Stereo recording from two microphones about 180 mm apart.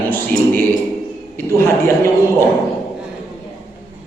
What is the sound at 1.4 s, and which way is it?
Speech, 15° left (ahead or behind).